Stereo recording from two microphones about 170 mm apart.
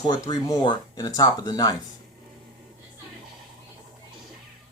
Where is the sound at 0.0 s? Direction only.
20° left (ahead or behind).